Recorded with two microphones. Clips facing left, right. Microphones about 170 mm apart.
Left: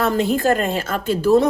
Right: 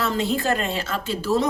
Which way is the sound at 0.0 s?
50° left (ahead or behind).